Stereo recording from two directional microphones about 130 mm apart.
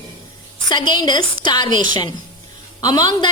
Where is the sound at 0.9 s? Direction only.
35° left (ahead or behind).